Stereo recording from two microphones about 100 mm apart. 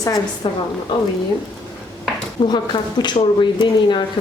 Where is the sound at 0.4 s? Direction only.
60° left (ahead or behind).